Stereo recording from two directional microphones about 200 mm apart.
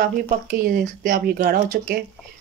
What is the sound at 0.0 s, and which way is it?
Speech, 45° right (ahead or behind).